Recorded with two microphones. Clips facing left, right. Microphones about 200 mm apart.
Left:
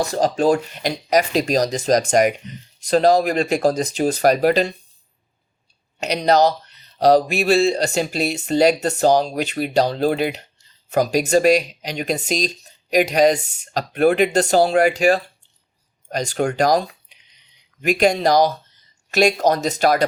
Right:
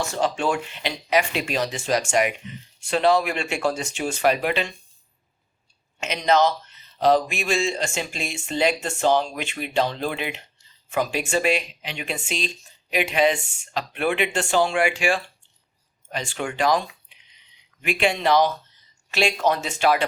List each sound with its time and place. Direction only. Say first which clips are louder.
0.0 s speech: left 6 dB; 40° left (ahead or behind)
6.0 s speech: left 4 dB; 35° left (ahead or behind)